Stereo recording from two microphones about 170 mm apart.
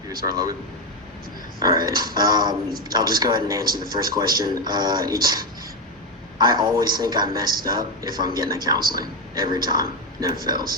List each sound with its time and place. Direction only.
0.3 s speech: 20° right (ahead or behind)
1.5 s speech: 25° right (ahead or behind)